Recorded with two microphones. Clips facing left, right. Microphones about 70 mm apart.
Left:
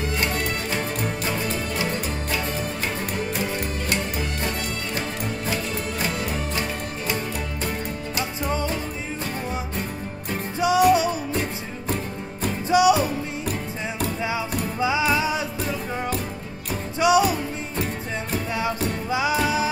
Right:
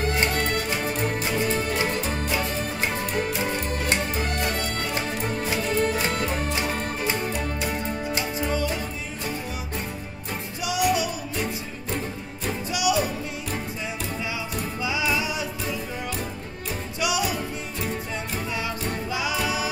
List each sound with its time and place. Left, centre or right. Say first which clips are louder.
6.1 s music: right 1 dB; right
10.6 s music: left 6 dB; left
12.6 s music: left 7 dB; left
14.8 s music: left 5 dB; left
17.0 s music: left 8 dB; left
18.6 s music: left 4 dB; left